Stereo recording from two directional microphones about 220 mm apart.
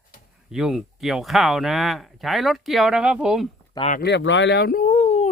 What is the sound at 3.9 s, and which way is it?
Speech, 50° left (ahead or behind).